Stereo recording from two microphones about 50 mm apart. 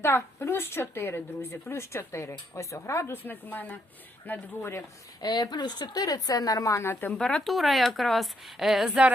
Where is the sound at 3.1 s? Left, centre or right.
Left.